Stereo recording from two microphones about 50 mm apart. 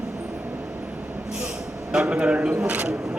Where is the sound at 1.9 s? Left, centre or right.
Centre.